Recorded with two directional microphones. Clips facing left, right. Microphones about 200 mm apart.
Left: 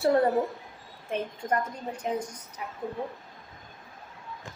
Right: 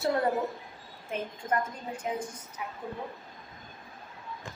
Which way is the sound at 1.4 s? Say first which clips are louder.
Left 1 dB; 40° left (ahead or behind).